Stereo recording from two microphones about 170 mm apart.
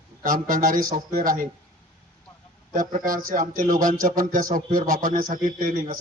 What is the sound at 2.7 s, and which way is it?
A man's voice, 50° right (ahead or behind).